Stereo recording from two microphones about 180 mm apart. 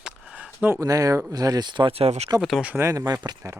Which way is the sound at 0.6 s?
15° right (ahead or behind).